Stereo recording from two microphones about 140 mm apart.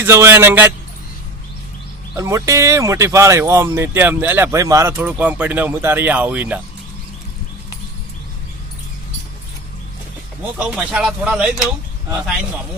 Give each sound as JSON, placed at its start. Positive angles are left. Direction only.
{"t": 0.0, "sound": "speech", "side_deg": -20}
{"t": 2.1, "sound": "speech", "side_deg": -20}
{"t": 4.9, "sound": "speech", "side_deg": -10}
{"t": 10.6, "sound": "speech", "side_deg": -5}